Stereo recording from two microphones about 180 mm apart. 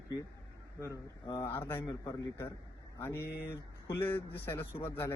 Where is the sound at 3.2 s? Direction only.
60° left (ahead or behind).